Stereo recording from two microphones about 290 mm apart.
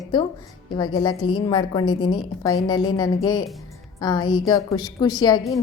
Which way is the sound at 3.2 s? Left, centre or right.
Centre.